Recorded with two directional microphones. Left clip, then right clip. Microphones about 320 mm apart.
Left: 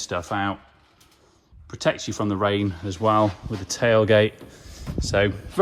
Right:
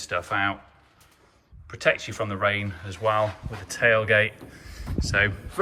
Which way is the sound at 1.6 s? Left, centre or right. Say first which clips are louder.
Right 1 dB; centre.